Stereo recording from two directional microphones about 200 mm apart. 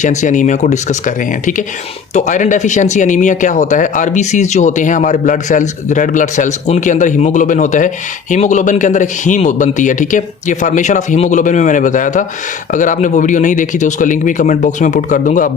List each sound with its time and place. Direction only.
0.0 s speech: 35° left (ahead or behind)